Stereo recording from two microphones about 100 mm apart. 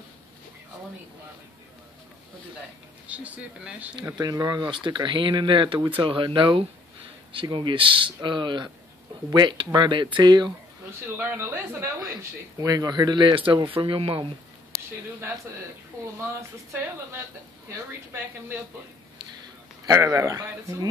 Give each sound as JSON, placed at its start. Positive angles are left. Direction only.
{"t": 3.1, "sound": "speech", "side_deg": -10}
{"t": 4.2, "sound": "speech", "side_deg": -40}
{"t": 11.1, "sound": "speech", "side_deg": -20}
{"t": 16.2, "sound": "a woman's voice", "side_deg": -25}
{"t": 19.9, "sound": "speech", "side_deg": -35}